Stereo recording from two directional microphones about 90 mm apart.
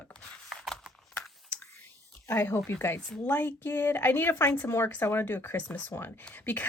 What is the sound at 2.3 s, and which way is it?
A woman's voice, 25° left (ahead or behind).